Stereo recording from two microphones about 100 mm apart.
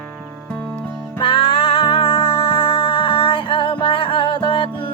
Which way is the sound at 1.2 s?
65° left (ahead or behind).